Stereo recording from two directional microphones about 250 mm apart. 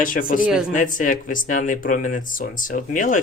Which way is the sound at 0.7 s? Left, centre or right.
Left.